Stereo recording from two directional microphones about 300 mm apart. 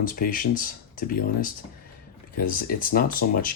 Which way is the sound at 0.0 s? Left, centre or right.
Left.